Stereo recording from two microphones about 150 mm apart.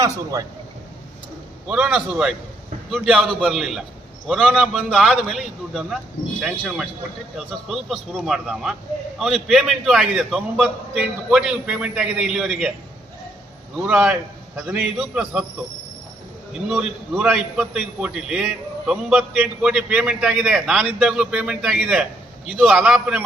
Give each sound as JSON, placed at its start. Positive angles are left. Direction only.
{"t": 0.0, "sound": "a man's voice", "side_deg": -25}
{"t": 1.6, "sound": "a man's voice", "side_deg": -5}
{"t": 7.3, "sound": "a man's voice", "side_deg": 0}
{"t": 13.8, "sound": "a man's voice", "side_deg": -5}
{"t": 16.6, "sound": "a man's voice", "side_deg": -5}